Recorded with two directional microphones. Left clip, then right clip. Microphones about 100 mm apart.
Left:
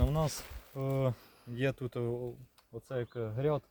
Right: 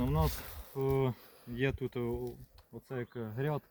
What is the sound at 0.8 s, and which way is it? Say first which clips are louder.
Speech: right 2 dB; 70° left (ahead or behind).